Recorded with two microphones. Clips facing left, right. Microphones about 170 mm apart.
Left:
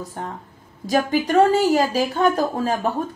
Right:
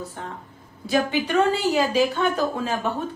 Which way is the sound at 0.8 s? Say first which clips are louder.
Left 3 dB; 40° left (ahead or behind).